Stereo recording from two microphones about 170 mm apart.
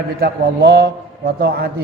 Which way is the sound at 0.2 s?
70° right (ahead or behind).